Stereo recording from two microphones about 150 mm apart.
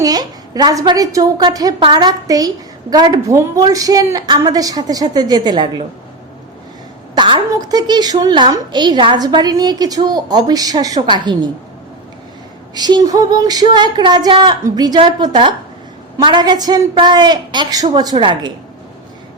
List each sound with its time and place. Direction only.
0.0 s a woman's voice: 25° right (ahead or behind)
7.2 s a woman's voice: 30° right (ahead or behind)
12.7 s a woman's voice: 25° right (ahead or behind)